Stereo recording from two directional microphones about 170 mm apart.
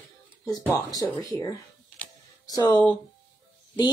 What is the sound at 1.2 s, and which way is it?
Speech, 25° left (ahead or behind).